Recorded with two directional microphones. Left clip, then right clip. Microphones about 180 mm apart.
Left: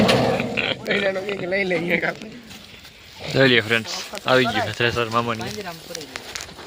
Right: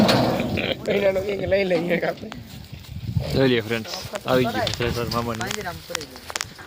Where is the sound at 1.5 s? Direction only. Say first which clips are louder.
Right 2 dB; 40° right (ahead or behind).